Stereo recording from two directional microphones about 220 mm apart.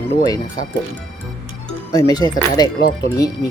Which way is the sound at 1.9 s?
15° left (ahead or behind).